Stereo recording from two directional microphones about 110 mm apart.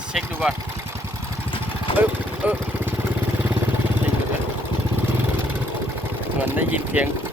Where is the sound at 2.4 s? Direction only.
15° right (ahead or behind).